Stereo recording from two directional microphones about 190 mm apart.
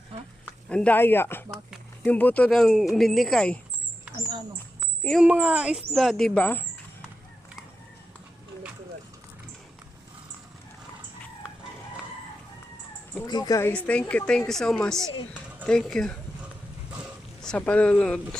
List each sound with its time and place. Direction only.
0.7 s speech: 5° left (ahead or behind)
5.0 s speech: centre (ahead or behind)
13.2 s speech: 20° left (ahead or behind); by 16.1 s centre (ahead or behind)
17.4 s speech: 5° left (ahead or behind)